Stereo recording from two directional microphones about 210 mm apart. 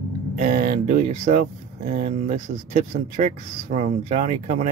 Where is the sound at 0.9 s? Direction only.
35° right (ahead or behind).